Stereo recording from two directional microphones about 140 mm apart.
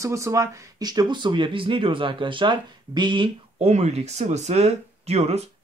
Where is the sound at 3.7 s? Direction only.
50° right (ahead or behind).